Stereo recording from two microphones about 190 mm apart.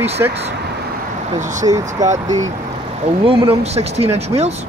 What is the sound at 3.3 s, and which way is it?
Speech, 30° right (ahead or behind).